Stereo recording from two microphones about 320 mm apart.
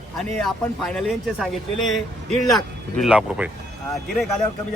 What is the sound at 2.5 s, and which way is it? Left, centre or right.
Speech, centre.